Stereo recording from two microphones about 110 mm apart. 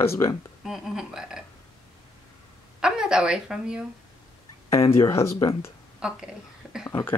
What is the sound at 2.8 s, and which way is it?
A woman's voice, 5° right (ahead or behind).